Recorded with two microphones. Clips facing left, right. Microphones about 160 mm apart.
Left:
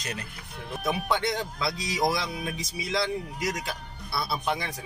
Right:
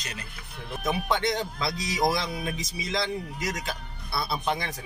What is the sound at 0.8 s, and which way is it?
Speech, 10° left (ahead or behind).